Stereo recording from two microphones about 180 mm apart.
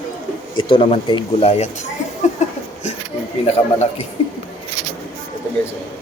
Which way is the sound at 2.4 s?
40° left (ahead or behind).